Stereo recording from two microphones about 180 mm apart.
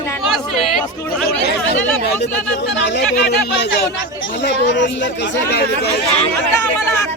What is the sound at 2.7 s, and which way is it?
Speech, 75° left (ahead or behind).